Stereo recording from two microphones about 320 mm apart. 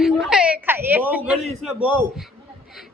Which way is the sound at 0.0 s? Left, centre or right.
Centre.